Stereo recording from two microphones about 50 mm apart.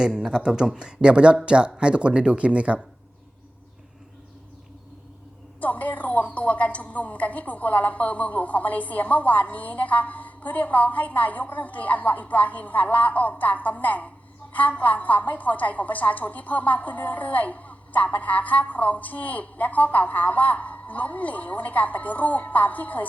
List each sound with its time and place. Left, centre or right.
0.2 s speech: centre
5.5 s a woman's voice: left